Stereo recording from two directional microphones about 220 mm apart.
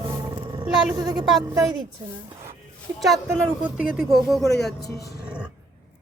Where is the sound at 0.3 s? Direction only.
20° right (ahead or behind).